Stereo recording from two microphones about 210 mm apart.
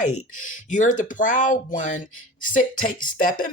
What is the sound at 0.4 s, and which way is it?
Speech, 35° left (ahead or behind).